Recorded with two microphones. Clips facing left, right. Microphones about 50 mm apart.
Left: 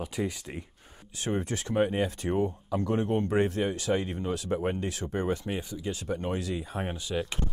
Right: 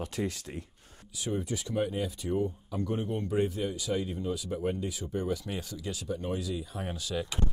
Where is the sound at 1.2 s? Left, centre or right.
Left.